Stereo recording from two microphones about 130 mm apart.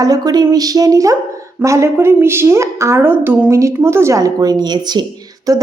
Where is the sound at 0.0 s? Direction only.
30° right (ahead or behind).